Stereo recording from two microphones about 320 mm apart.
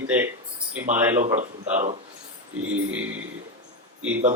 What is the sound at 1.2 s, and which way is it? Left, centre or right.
Speech, right.